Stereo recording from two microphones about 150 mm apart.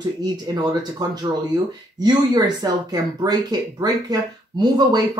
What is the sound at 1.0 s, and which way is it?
Speech, 25° right (ahead or behind).